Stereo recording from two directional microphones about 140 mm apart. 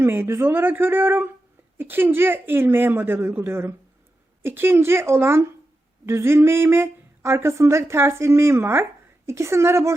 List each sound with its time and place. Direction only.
0.0 s a woman's voice: 15° right (ahead or behind)